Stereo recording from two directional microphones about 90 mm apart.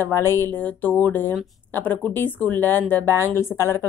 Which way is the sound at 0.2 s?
30° left (ahead or behind).